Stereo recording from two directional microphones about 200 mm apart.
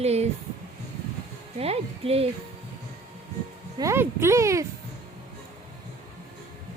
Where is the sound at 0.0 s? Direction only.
30° right (ahead or behind).